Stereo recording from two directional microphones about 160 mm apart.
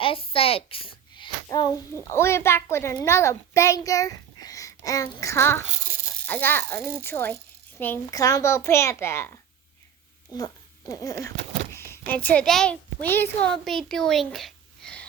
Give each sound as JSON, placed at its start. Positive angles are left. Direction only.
{"t": 0.0, "sound": "a child's voice", "side_deg": 35}